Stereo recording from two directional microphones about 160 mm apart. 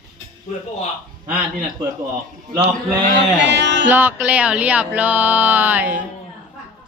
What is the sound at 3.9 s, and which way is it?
Speech, 10° right (ahead or behind).